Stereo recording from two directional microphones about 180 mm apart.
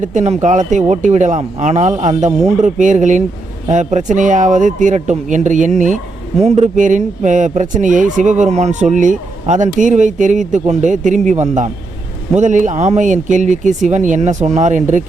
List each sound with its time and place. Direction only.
0.0 s speech: 40° right (ahead or behind)